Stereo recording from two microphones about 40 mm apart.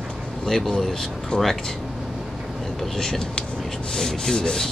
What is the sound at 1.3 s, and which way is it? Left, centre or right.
Speech, left.